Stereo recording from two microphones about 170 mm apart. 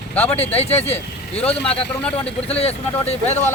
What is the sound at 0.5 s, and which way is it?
Speech, 40° left (ahead or behind).